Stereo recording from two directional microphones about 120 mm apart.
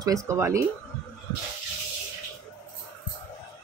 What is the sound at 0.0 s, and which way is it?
Speech, 25° right (ahead or behind).